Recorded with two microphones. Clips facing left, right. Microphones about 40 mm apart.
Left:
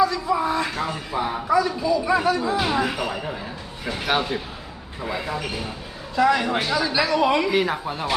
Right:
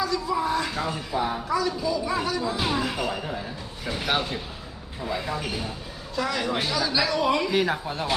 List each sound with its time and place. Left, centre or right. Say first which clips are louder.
0.0 s a sound: left 5 dB; left
0.8 s a man's voice: left 1 dB; centre
7.4 s a man's voice: left 2 dB; centre